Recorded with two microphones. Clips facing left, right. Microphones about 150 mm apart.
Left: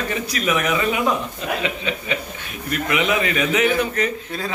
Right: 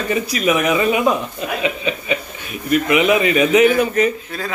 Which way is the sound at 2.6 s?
15° right (ahead or behind).